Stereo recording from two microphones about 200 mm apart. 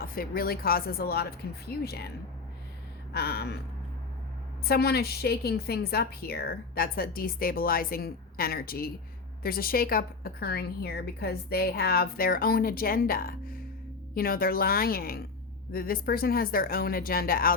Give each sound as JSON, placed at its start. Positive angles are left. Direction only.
{"t": 0.0, "sound": "a woman's voice", "side_deg": 50}
{"t": 3.1, "sound": "a woman's voice", "side_deg": 50}
{"t": 4.6, "sound": "a woman's voice", "side_deg": 50}